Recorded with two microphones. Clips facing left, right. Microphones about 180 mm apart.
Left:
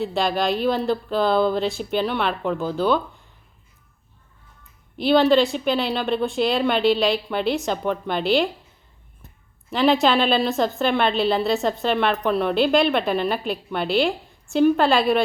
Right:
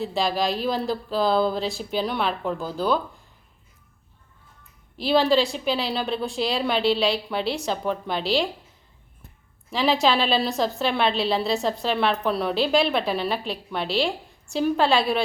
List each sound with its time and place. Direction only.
0.0 s a woman's voice: centre (ahead or behind)
4.9 s a woman's voice: centre (ahead or behind)
9.7 s a woman's voice: centre (ahead or behind)